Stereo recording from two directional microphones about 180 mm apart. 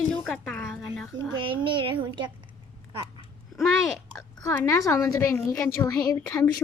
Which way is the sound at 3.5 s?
Centre (ahead or behind).